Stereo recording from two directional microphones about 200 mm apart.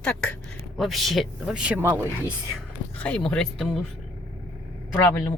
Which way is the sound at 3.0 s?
5° left (ahead or behind).